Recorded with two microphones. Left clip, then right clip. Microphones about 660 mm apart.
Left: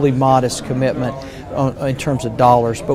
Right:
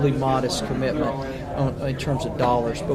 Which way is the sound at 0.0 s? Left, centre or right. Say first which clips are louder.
Left 8 dB; left.